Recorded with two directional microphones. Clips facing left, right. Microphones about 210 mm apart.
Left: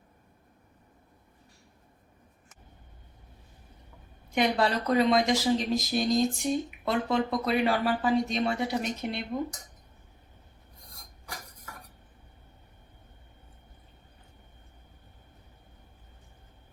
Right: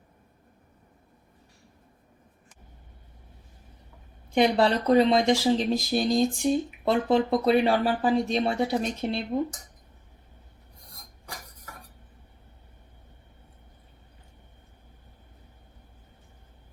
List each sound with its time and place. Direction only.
4.4 s speech: 30° right (ahead or behind)